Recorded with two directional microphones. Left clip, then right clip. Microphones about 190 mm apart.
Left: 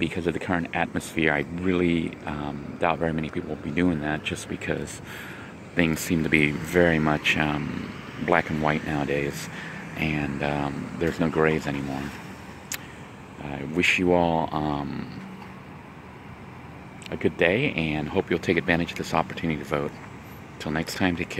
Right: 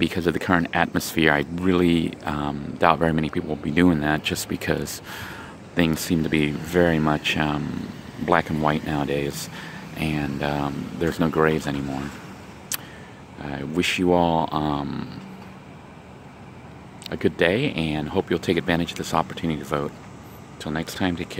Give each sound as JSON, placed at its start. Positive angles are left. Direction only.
{"t": 0.0, "sound": "speech", "side_deg": -30}
{"t": 13.4, "sound": "speech", "side_deg": -20}
{"t": 17.1, "sound": "speech", "side_deg": -20}